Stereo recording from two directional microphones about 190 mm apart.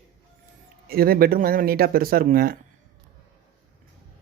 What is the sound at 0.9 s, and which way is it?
Speech, 50° right (ahead or behind).